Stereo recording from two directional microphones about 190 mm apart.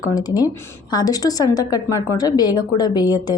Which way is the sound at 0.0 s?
20° left (ahead or behind).